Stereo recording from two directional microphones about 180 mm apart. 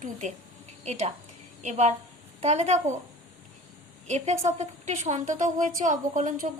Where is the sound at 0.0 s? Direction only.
45° right (ahead or behind).